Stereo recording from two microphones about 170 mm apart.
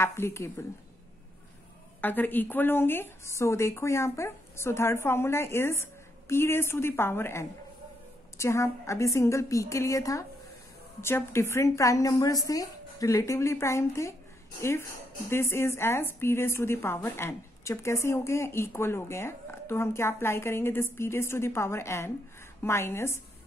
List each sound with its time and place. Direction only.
0.0 s a woman's voice: 15° left (ahead or behind)
2.0 s a woman's voice: 10° left (ahead or behind)